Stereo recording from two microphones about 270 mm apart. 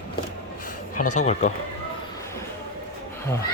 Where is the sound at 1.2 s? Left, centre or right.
Left.